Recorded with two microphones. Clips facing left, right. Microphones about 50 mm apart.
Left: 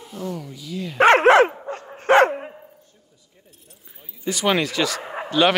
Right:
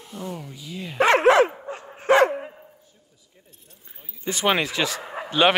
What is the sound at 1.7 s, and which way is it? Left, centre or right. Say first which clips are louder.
Dog: left 3 dB; centre.